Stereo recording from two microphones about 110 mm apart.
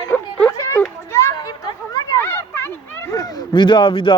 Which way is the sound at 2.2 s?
20° left (ahead or behind).